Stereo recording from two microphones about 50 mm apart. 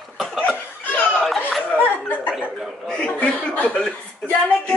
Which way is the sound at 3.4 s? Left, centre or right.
Left.